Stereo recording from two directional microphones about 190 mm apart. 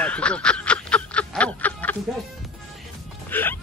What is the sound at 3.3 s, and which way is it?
Speech, 10° left (ahead or behind).